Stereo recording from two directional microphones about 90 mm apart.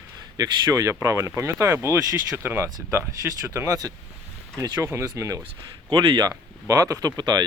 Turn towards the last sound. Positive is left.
turn(degrees=-50)  # may be behind; listen again after turning